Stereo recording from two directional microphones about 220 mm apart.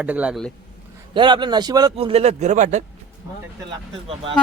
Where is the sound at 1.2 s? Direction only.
20° right (ahead or behind).